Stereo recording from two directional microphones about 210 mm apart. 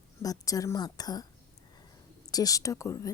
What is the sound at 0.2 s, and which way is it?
Speech, 15° left (ahead or behind).